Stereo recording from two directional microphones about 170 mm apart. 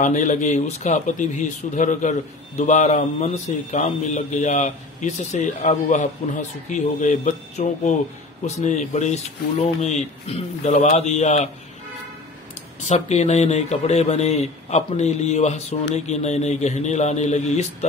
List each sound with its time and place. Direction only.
0.0 s speech: 45° left (ahead or behind)
12.8 s speech: 40° left (ahead or behind)